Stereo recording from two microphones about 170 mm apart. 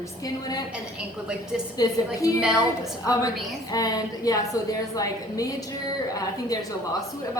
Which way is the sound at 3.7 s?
20° left (ahead or behind).